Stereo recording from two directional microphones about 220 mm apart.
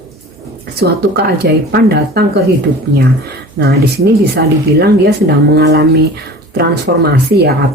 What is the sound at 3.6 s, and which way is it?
Speech, 50° right (ahead or behind).